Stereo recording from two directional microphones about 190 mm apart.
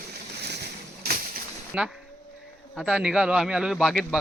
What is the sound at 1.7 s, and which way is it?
A man's voice, 5° right (ahead or behind).